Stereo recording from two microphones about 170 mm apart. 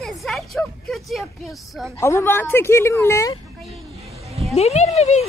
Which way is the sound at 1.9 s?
15° left (ahead or behind).